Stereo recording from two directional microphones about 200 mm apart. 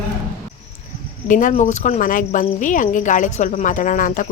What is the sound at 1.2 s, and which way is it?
Cricket, 40° left (ahead or behind).